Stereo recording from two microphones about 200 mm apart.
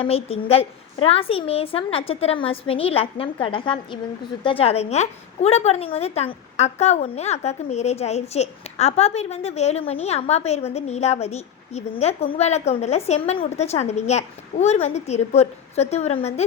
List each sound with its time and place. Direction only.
0.0 s a woman's voice: 30° left (ahead or behind)